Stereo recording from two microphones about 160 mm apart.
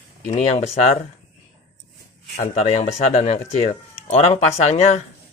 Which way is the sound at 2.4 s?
45° left (ahead or behind).